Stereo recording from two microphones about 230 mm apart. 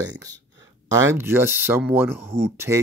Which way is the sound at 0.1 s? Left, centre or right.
Centre.